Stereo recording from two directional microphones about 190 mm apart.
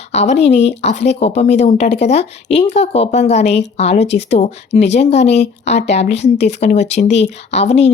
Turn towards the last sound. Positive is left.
turn(degrees=35)  # may be behind; listen again after turning